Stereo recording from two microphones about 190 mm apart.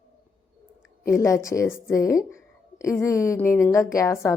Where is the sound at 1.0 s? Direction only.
15° left (ahead or behind).